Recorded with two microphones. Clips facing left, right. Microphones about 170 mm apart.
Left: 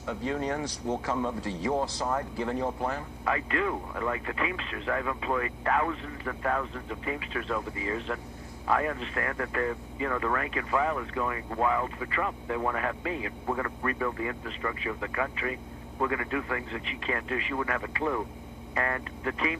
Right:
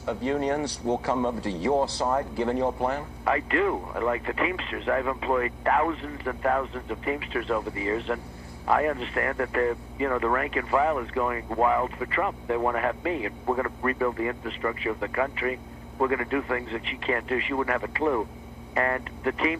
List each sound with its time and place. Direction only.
0.0 s speech: 30° right (ahead or behind)